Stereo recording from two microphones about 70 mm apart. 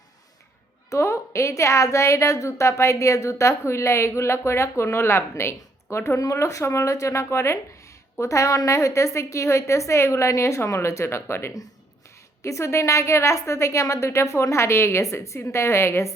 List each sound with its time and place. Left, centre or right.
0.9 s a woman's voice: left